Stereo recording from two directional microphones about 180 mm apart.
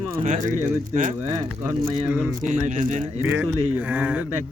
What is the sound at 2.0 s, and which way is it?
Speech, 10° right (ahead or behind).